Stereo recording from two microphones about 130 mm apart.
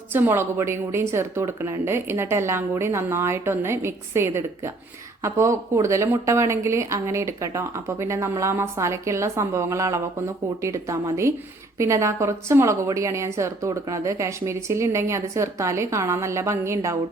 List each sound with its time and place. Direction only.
0.1 s speech: 15° right (ahead or behind)